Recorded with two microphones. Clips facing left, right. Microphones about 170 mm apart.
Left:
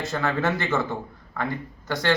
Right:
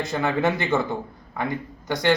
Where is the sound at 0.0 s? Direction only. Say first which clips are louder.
Right 2 dB; 15° right (ahead or behind).